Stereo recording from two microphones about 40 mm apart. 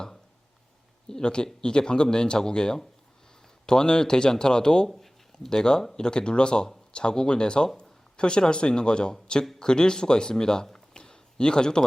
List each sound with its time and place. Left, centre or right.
1.0 s speech: centre
4.9 s a sound: centre
5.8 s speech: centre